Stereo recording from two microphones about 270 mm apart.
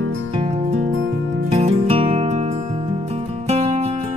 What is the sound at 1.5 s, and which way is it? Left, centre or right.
Music, right.